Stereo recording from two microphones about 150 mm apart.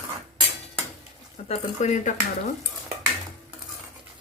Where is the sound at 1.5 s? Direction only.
55° left (ahead or behind).